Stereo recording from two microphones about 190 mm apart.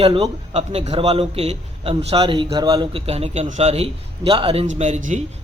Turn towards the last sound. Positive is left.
turn(degrees=-40)  # may be behind; listen again after turning